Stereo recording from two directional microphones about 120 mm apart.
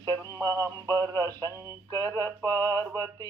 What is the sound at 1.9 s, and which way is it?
Male singing, 35° right (ahead or behind).